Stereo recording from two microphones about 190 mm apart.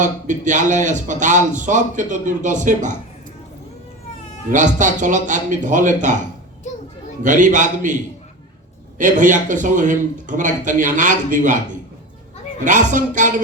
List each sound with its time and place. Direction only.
0.0 s speech: 40° right (ahead or behind)
4.5 s speech: 40° right (ahead or behind)
7.2 s speech: 40° right (ahead or behind)
9.0 s speech: 40° right (ahead or behind)
12.6 s speech: 40° right (ahead or behind)